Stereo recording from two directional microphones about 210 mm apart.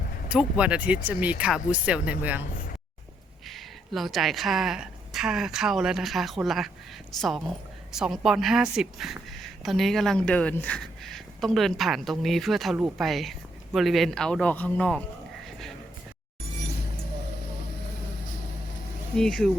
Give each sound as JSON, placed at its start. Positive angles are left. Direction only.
{"t": 0.3, "sound": "a woman's voice", "side_deg": -5}
{"t": 3.5, "sound": "a woman's voice", "side_deg": 0}
{"t": 19.1, "sound": "a woman's voice", "side_deg": 5}